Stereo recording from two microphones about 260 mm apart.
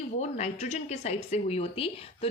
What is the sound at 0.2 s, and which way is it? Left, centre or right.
Speech, left.